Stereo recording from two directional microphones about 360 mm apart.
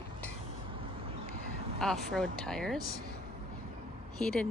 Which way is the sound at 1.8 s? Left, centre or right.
Centre.